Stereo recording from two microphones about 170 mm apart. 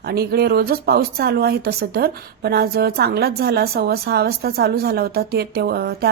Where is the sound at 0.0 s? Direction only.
70° right (ahead or behind).